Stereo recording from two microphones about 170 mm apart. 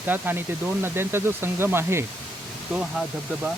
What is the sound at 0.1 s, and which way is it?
Speech, 10° right (ahead or behind).